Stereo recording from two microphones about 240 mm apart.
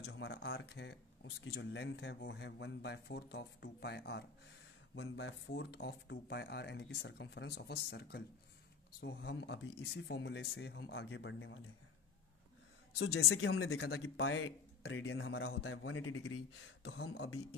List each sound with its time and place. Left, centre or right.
0.0 s speech: left
12.9 s speech: left